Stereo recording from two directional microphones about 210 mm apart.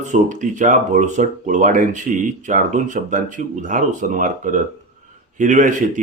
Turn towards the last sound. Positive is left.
turn(degrees=-35)  # may be behind; listen again after turning